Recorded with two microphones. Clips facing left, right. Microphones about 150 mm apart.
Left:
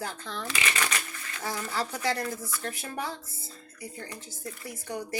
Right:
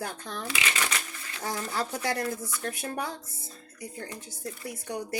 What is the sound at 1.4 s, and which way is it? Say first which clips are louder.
Speech: right 1 dB; 50° right (ahead or behind).